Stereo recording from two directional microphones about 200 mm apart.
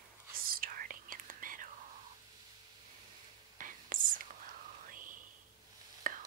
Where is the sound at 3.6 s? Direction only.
40° right (ahead or behind).